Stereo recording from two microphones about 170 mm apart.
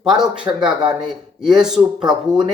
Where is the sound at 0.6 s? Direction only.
25° right (ahead or behind).